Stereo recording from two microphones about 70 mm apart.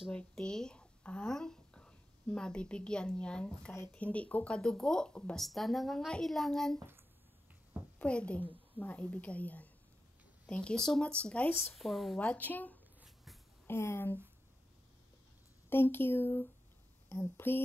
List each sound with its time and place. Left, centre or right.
0.1 s speech: centre
5.4 s a woman's voice: centre
8.0 s a woman's voice: centre
11.7 s a woman's voice: centre
12.2 s a woman's voice: left
13.0 s shuffle: centre
13.7 s speech: left
15.7 s speech: left